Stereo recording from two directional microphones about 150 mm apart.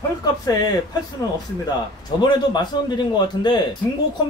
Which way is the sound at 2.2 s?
30° left (ahead or behind).